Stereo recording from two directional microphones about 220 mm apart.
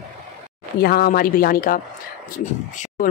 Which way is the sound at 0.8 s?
45° left (ahead or behind).